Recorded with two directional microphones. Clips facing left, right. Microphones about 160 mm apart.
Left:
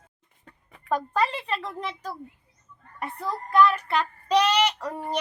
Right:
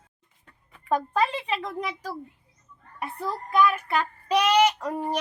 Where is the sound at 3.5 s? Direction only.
10° right (ahead or behind).